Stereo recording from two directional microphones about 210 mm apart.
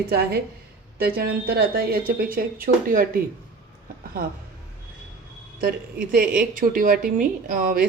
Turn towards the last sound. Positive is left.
turn(degrees=-40)  # may be behind; listen again after turning